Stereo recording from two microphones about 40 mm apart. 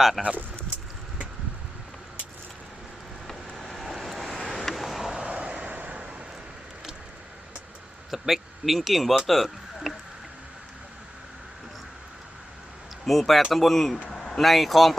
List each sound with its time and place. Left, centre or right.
0.2 s speech: centre
3.2 s vehicle: centre
5.4 s vehicle: right
8.1 s speech: centre
13.1 s speech: centre